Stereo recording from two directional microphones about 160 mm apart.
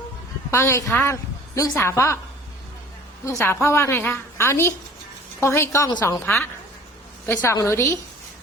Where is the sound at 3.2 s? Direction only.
15° left (ahead or behind).